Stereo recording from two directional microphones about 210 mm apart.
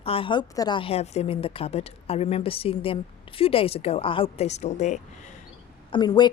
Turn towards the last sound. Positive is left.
turn(degrees=20)  # may be behind; listen again after turning